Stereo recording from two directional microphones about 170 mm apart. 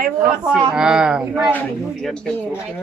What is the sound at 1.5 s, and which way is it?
Speech, 5° left (ahead or behind).